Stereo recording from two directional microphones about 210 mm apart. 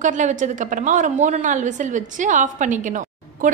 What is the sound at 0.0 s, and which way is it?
A woman's voice, 35° right (ahead or behind).